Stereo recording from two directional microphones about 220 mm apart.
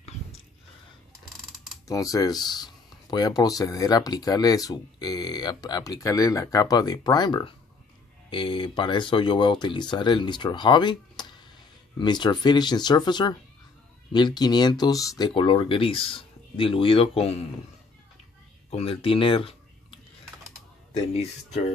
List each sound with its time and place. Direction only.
1.9 s speech: 15° left (ahead or behind)
18.8 s speech: 25° left (ahead or behind)